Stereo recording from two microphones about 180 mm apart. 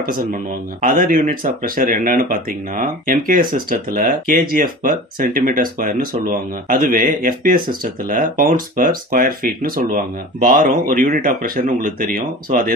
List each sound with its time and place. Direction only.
0.0 s speech: 55° right (ahead or behind)